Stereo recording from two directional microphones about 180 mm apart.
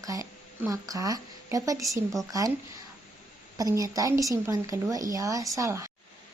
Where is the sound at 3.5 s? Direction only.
20° right (ahead or behind).